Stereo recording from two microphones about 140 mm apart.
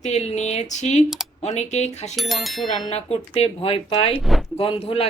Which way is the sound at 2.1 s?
Centre (ahead or behind).